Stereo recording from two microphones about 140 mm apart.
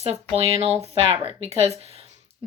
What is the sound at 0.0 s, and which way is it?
Speech, 45° right (ahead or behind).